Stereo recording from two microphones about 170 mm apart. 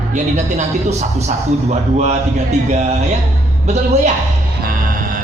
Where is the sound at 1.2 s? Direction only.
40° right (ahead or behind).